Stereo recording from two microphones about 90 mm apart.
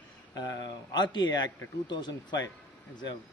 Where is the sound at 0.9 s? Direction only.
55° left (ahead or behind).